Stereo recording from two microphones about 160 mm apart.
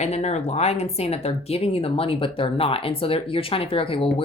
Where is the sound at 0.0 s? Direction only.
45° left (ahead or behind).